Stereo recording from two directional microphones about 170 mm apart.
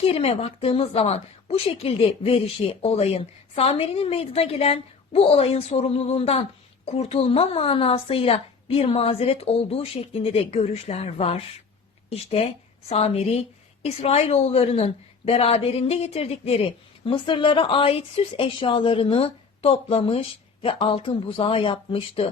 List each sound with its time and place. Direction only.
0.0 s a woman's voice: 35° left (ahead or behind)